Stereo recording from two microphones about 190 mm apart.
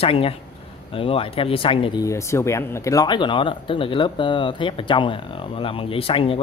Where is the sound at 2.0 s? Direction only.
15° left (ahead or behind).